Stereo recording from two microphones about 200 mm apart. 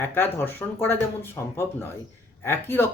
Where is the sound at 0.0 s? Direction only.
10° left (ahead or behind).